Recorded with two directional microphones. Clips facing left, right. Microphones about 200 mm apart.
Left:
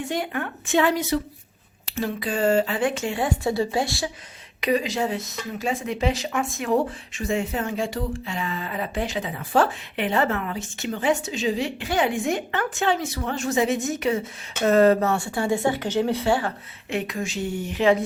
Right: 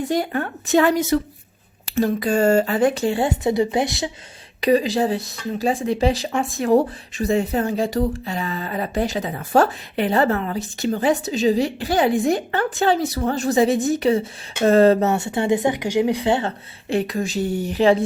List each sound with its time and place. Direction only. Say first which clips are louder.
0.0 s speech: right 5 dB; 35° right (ahead or behind); by 4.1 s 20° right (ahead or behind)
4.6 s speech: right 6 dB; 35° right (ahead or behind)